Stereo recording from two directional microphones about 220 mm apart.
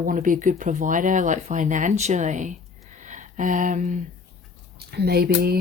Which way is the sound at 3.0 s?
35° right (ahead or behind).